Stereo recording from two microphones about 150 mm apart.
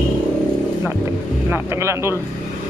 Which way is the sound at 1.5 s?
20° right (ahead or behind).